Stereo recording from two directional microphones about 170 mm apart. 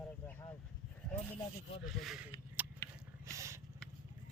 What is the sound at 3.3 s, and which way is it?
Vehicle, 15° right (ahead or behind).